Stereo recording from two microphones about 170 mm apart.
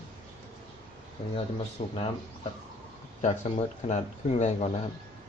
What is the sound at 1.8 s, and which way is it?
Speech, 40° left (ahead or behind).